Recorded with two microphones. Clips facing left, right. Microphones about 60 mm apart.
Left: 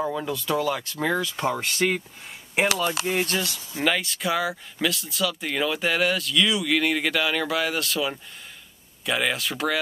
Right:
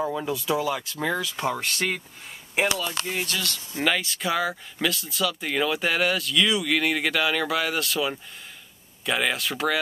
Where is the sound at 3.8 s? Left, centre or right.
Centre.